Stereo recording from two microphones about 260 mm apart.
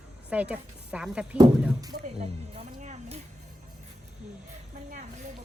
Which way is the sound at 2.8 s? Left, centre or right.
Right.